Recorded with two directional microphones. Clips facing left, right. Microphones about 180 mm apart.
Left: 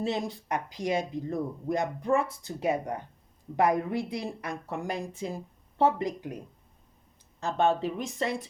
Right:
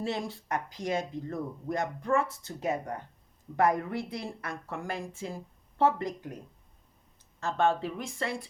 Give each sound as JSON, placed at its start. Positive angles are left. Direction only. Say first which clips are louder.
{"t": 0.0, "sound": "speech", "louder": "left 3 dB", "side_deg": 20}
{"t": 7.3, "sound": "a woman's voice", "louder": "left 1 dB", "side_deg": 15}